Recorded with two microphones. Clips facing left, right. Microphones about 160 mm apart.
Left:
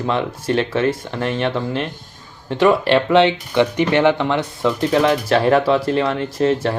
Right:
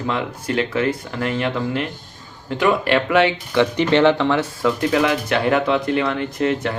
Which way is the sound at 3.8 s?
15° left (ahead or behind).